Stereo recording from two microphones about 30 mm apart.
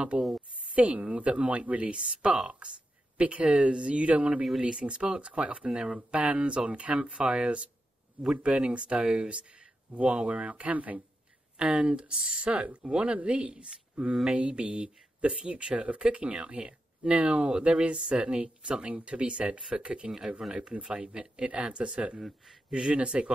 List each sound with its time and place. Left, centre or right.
0.1 s speech: right
1.8 s speech: right
2.6 s speech: right
3.7 s speech: right
4.0 s speech: right
4.6 s speech: right
6.5 s speech: right
8.4 s speech: right
11.5 s speech: right
12.1 s speech: right
13.0 s speech: right
20.4 s speech: centre
20.8 s speech: right